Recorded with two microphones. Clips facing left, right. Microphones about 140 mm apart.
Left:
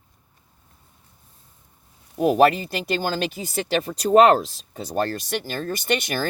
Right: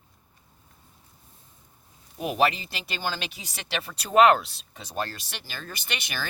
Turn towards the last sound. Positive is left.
turn(degrees=50)  # may be behind; listen again after turning